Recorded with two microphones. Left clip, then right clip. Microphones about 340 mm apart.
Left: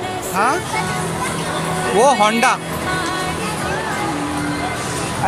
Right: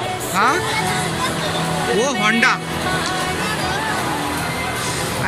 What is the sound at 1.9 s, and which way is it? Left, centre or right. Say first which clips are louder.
Speech: left 5 dB; centre.